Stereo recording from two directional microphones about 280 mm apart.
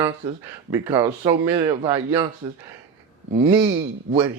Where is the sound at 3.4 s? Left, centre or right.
Centre.